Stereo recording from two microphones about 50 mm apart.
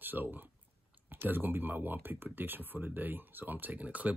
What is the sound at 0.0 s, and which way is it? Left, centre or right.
Speech, right.